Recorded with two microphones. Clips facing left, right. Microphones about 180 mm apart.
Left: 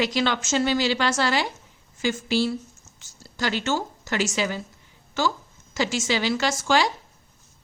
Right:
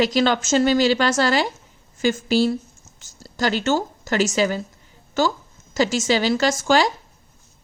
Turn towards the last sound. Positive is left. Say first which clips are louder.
# right 4 dB
turn(degrees=-40)  # may be behind; listen again after turning